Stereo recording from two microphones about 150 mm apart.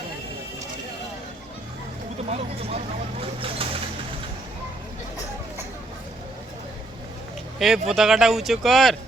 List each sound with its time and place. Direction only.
2.3 s speech: 45° right (ahead or behind)
7.6 s speech: centre (ahead or behind)